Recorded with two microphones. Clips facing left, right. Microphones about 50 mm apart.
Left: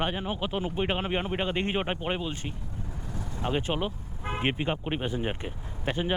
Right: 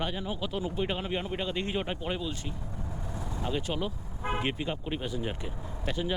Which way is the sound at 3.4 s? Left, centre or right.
Left.